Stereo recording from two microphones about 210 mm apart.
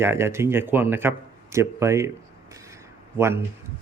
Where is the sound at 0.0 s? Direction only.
10° right (ahead or behind).